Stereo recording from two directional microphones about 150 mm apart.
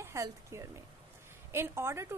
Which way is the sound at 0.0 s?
20° right (ahead or behind).